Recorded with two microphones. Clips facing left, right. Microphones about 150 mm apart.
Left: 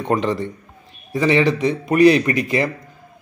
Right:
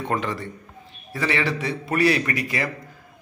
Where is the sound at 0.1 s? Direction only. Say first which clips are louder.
Left 8 dB; 20° left (ahead or behind).